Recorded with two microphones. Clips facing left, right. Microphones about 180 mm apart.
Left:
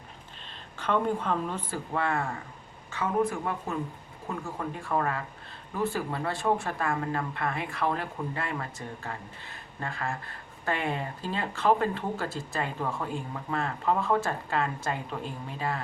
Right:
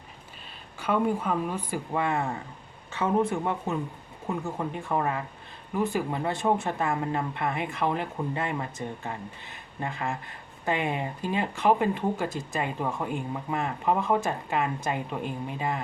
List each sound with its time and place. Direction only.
0.8 s speech: 10° right (ahead or behind)